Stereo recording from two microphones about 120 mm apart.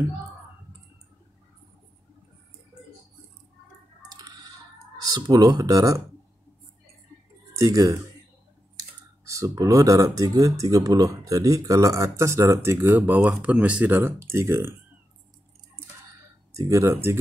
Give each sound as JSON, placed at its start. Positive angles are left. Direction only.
{"t": 5.1, "sound": "speech", "side_deg": -35}
{"t": 7.5, "sound": "speech", "side_deg": -25}
{"t": 9.2, "sound": "speech", "side_deg": -25}
{"t": 16.5, "sound": "speech", "side_deg": -25}